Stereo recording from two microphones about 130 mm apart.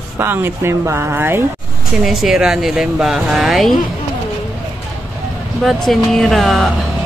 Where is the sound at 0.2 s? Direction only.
15° right (ahead or behind).